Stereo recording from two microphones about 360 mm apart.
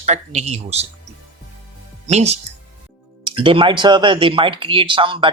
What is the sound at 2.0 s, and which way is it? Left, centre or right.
Speech, centre.